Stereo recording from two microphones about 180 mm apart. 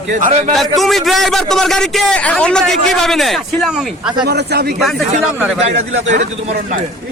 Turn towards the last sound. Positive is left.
turn(degrees=-35)  # may be behind; listen again after turning